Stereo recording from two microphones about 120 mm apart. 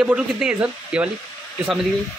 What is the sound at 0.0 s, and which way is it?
Speech, 5° right (ahead or behind).